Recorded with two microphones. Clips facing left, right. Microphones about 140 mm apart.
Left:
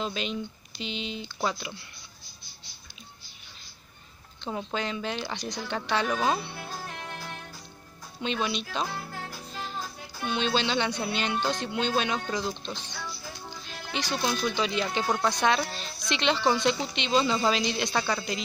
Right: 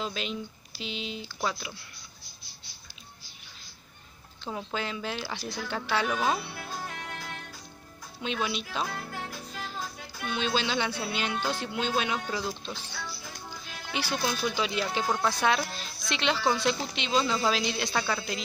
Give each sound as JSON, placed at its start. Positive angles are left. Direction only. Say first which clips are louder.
{"t": 0.0, "sound": "speech", "louder": "left 2 dB", "side_deg": 0}
{"t": 4.5, "sound": "speech", "louder": "left 2 dB", "side_deg": 5}
{"t": 6.5, "sound": "music", "louder": "even", "side_deg": 20}
{"t": 8.2, "sound": "speech", "louder": "left 2 dB", "side_deg": -5}
{"t": 10.2, "sound": "speech", "louder": "left 2 dB", "side_deg": -5}